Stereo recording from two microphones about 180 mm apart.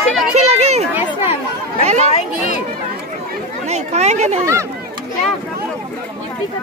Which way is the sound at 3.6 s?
35° right (ahead or behind).